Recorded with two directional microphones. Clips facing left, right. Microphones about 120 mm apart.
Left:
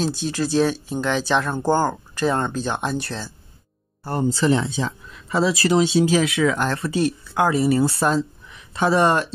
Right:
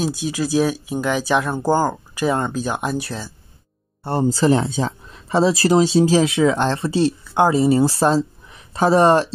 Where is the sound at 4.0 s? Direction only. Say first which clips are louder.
Right 3 dB; 30° right (ahead or behind).